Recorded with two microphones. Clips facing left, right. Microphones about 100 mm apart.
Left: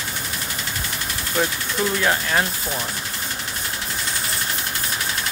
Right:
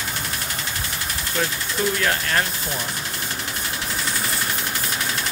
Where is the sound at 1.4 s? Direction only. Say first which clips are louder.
Left 3 dB; 15° left (ahead or behind).